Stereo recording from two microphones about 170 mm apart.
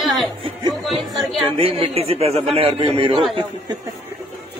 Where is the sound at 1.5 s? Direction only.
35° right (ahead or behind).